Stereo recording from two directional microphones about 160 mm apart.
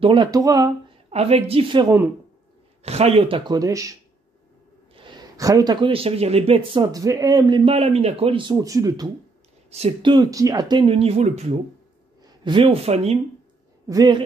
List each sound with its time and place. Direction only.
0.0 s speech: 30° right (ahead or behind)
1.1 s speech: 40° right (ahead or behind)
2.8 s speech: 40° right (ahead or behind); by 3.9 s 20° right (ahead or behind)
4.9 s speech: 25° right (ahead or behind)
8.5 s speech: 20° right (ahead or behind)
9.7 s speech: 40° right (ahead or behind)
10.1 s speech: 20° right (ahead or behind); by 11.6 s 45° right (ahead or behind)
12.2 s speech: 30° right (ahead or behind)
12.9 s speech: 45° right (ahead or behind)
13.8 s speech: 25° right (ahead or behind)